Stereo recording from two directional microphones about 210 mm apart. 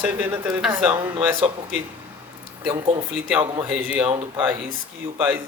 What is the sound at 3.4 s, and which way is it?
Speech, 20° right (ahead or behind).